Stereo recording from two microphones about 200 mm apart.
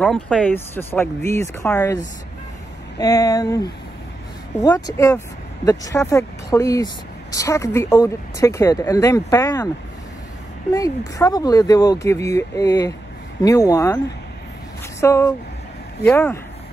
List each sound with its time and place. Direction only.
0.0 s speech: centre (ahead or behind)
3.0 s speech: 15° left (ahead or behind)
10.7 s speech: 15° left (ahead or behind)